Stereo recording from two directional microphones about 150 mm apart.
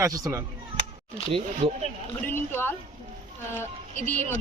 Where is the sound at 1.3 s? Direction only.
35° right (ahead or behind).